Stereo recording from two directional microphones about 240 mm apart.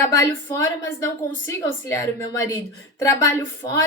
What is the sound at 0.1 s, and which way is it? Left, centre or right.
Speech, centre.